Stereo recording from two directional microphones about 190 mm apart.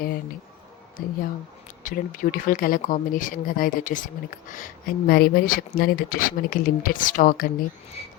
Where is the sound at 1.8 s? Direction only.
45° left (ahead or behind).